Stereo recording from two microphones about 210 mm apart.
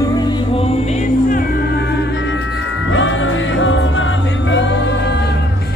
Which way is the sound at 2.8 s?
65° left (ahead or behind).